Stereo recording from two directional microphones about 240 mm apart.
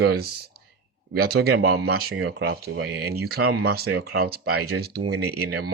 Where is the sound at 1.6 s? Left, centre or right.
Right.